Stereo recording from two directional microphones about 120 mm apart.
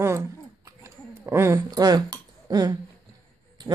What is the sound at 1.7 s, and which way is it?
Speech, 35° right (ahead or behind).